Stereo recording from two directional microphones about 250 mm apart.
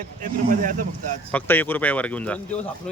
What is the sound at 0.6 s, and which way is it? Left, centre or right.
Speech, right.